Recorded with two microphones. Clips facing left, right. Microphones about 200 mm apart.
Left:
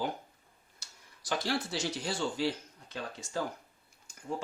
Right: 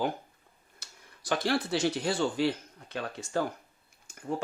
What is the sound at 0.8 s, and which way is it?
Speech, 60° right (ahead or behind).